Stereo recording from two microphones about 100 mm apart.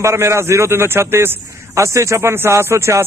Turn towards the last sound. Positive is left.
turn(degrees=-25)  # may be behind; listen again after turning